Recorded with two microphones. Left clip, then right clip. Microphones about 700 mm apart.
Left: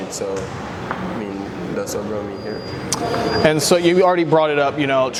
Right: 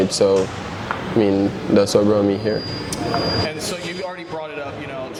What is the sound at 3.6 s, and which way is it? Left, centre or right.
Speech, left.